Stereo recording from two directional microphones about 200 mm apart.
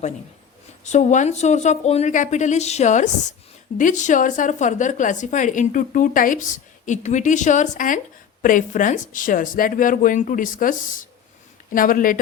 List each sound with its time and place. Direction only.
0.9 s a woman's voice: 35° left (ahead or behind)